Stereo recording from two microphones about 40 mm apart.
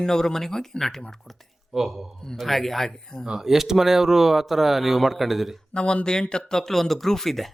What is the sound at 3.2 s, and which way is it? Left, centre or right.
Speech, centre.